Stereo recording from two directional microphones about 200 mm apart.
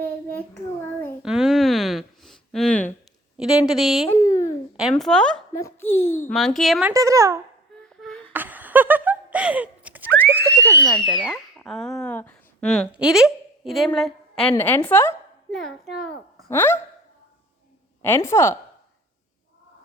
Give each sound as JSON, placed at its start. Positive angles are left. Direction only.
{"t": 0.0, "sound": "child singing", "side_deg": 10}
{"t": 1.2, "sound": "a sound", "side_deg": -5}
{"t": 3.7, "sound": "speech", "side_deg": 0}
{"t": 4.1, "sound": "a sound", "side_deg": 15}
{"t": 4.8, "sound": "speech", "side_deg": 0}
{"t": 5.5, "sound": "a woman's voice", "side_deg": 15}
{"t": 6.2, "sound": "speech", "side_deg": 0}
{"t": 6.9, "sound": "speech", "side_deg": -15}
{"t": 7.9, "sound": "a sound", "side_deg": 0}
{"t": 10.8, "sound": "a woman's voice", "side_deg": 5}
{"t": 16.5, "sound": "a woman's voice", "side_deg": 10}
{"t": 18.0, "sound": "a woman's voice", "side_deg": 10}